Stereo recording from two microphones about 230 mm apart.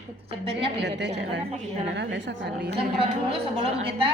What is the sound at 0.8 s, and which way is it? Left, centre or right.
Speech, right.